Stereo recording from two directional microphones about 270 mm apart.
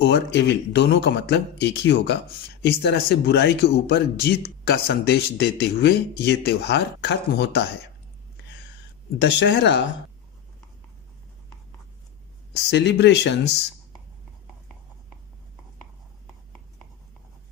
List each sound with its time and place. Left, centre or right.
0.0 s speech: left
9.1 s speech: left
12.7 s speech: left